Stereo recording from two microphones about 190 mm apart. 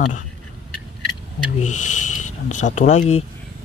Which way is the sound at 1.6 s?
40° left (ahead or behind).